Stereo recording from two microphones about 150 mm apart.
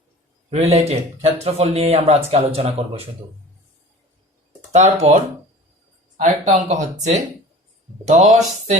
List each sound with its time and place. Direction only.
0.5 s speech: 45° right (ahead or behind)
4.7 s speech: 50° right (ahead or behind)